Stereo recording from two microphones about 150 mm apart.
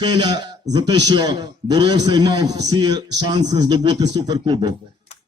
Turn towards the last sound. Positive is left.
turn(degrees=-30)  # may be behind; listen again after turning